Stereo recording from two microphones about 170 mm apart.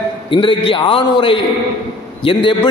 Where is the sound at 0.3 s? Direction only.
30° left (ahead or behind).